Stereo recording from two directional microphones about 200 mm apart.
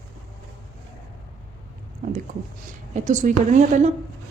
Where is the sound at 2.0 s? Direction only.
40° right (ahead or behind).